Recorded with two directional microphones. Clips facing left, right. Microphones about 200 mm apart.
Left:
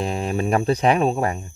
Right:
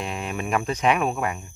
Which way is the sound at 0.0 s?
35° left (ahead or behind).